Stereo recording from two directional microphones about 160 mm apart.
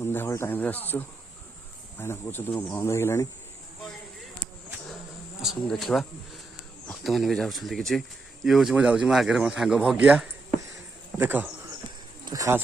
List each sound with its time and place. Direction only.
0.0 s speech: 15° left (ahead or behind)
5.4 s speech: centre (ahead or behind)
12.2 s speech: 20° right (ahead or behind)